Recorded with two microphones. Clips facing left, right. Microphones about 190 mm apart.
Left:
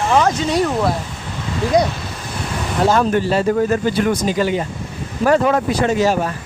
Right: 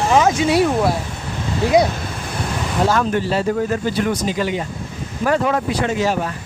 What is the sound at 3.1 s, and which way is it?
Speech, 50° left (ahead or behind).